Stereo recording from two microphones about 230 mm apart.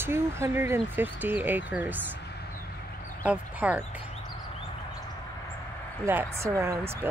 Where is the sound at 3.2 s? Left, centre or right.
Centre.